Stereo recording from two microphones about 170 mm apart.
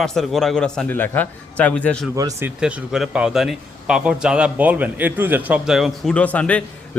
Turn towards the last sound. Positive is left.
turn(degrees=10)  # may be behind; listen again after turning